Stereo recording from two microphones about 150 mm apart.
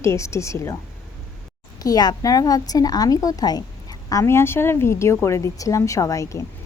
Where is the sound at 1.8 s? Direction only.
25° left (ahead or behind).